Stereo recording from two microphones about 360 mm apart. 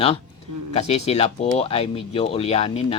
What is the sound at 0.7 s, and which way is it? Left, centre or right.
Speech, centre.